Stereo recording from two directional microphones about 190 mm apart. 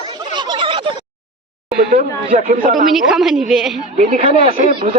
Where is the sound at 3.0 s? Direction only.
Centre (ahead or behind).